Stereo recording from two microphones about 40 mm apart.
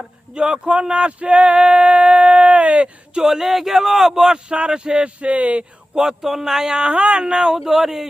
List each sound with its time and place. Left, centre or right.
0.3 s speech: right
3.2 s speech: centre
5.2 s speech: right
6.0 s speech: centre
7.6 s speech: centre